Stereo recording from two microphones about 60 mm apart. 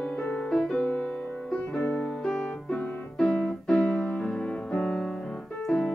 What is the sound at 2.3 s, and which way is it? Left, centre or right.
Music, centre.